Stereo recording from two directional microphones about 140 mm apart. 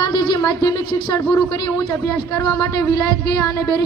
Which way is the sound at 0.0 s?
35° left (ahead or behind).